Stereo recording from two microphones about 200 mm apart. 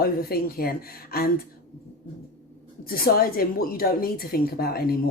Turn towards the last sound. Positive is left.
turn(degrees=50)  # may be behind; listen again after turning